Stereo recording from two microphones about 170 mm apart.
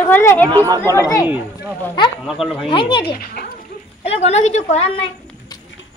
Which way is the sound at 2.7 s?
30° left (ahead or behind).